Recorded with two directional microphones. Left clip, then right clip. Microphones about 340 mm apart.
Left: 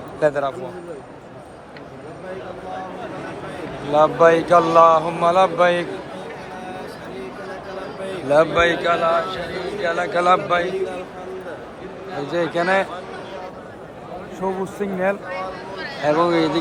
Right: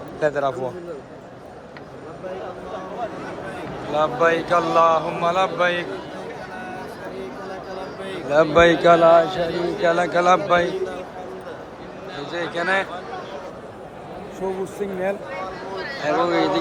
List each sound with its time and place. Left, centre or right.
0.2 s a man's voice: centre
3.9 s speech: centre
8.3 s a man's voice: centre
12.3 s speech: centre
14.4 s speech: centre
16.2 s speech: centre